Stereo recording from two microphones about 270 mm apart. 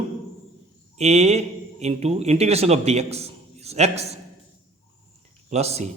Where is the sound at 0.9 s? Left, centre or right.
Right.